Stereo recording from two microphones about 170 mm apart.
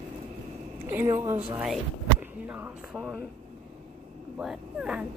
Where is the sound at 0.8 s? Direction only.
15° right (ahead or behind).